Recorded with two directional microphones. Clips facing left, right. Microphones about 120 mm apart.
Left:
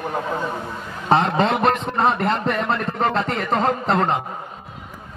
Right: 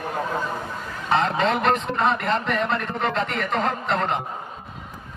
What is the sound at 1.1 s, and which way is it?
A man's voice, 35° left (ahead or behind).